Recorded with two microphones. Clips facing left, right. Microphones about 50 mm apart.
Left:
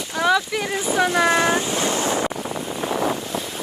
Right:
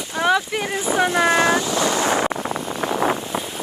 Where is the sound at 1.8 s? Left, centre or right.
Right.